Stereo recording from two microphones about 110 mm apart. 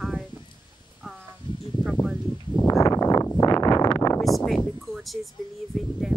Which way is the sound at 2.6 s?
30° left (ahead or behind).